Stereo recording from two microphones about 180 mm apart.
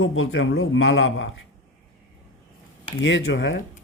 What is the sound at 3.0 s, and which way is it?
Speech, 90° left.